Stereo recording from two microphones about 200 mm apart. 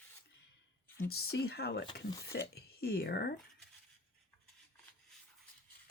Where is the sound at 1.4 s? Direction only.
55° left (ahead or behind).